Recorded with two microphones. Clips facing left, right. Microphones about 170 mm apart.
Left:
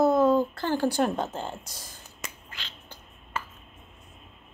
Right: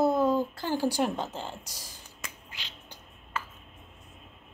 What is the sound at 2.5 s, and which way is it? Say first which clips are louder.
Finger snapping: left 2 dB; 15° right (ahead or behind).